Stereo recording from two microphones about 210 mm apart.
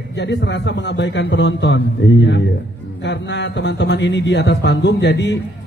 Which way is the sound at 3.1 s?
55° left (ahead or behind).